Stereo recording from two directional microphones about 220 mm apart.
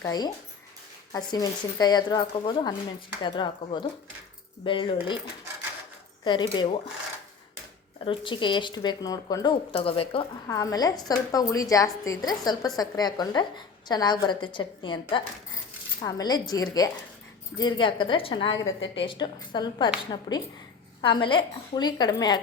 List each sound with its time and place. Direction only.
0.0 s a woman's voice: 15° left (ahead or behind)
6.5 s speech: 25° left (ahead or behind)
8.0 s a woman's voice: 20° left (ahead or behind)